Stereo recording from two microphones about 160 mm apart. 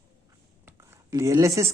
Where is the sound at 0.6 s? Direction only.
15° right (ahead or behind).